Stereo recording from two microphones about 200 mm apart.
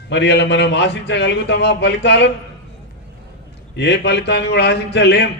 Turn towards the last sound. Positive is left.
turn(degrees=60)  # may be behind; listen again after turning